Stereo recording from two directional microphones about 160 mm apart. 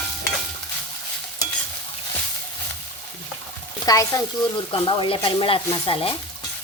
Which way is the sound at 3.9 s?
20° left (ahead or behind).